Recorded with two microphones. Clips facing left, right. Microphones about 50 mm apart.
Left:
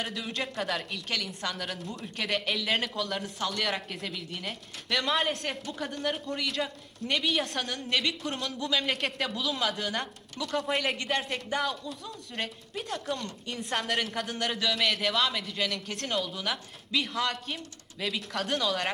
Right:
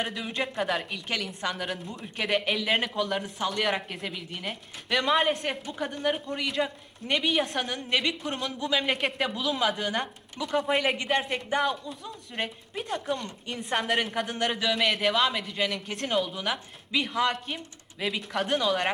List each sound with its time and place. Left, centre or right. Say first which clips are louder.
0.0 s a woman's voice: right 3 dB; centre
17.1 s a woman's voice: right 4 dB; centre